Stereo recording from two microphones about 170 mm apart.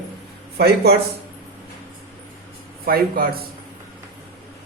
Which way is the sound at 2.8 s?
60° right (ahead or behind).